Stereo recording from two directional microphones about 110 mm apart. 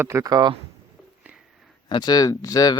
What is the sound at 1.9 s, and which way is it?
Speech, 40° left (ahead or behind).